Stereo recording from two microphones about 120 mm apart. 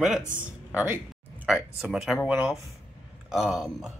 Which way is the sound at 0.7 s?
15° right (ahead or behind).